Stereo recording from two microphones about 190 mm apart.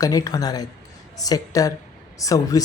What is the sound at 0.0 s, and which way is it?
Speech, 20° left (ahead or behind).